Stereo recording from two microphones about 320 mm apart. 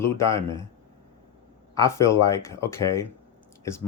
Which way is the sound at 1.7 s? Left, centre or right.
Centre.